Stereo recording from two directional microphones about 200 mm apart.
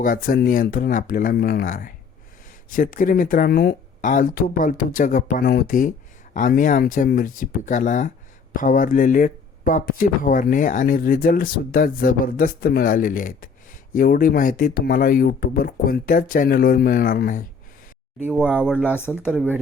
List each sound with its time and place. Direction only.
0.0 s speech: 45° left (ahead or behind)
18.2 s speech: 5° right (ahead or behind)
18.9 s speech: 10° left (ahead or behind)